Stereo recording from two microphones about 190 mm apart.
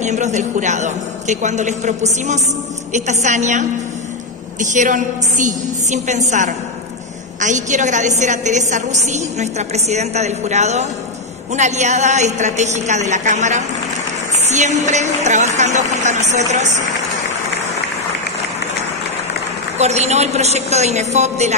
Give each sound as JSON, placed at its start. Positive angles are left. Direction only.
{"t": 0.0, "sound": "a woman's voice", "side_deg": -40}
{"t": 19.8, "sound": "a woman's voice", "side_deg": -35}